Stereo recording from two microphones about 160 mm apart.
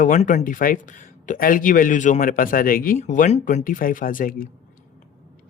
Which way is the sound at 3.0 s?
50° left (ahead or behind).